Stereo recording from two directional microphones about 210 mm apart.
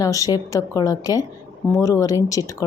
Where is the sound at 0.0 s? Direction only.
15° left (ahead or behind).